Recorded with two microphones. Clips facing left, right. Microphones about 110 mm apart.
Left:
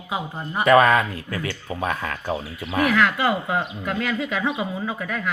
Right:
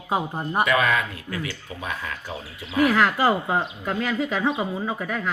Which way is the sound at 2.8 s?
30° right (ahead or behind).